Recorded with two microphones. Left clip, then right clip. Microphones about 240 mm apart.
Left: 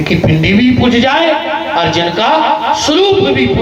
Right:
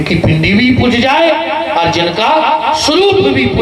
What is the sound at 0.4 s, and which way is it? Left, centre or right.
A man's voice, right.